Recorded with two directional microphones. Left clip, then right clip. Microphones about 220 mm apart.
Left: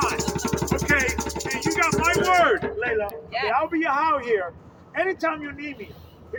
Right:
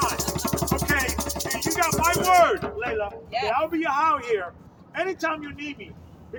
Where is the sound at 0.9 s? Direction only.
20° right (ahead or behind).